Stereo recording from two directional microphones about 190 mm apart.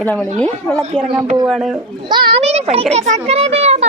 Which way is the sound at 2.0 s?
25° right (ahead or behind).